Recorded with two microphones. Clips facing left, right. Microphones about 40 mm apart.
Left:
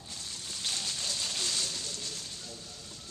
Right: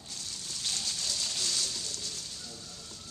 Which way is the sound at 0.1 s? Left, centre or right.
Centre.